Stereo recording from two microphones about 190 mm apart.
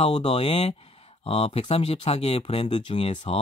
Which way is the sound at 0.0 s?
30° left (ahead or behind).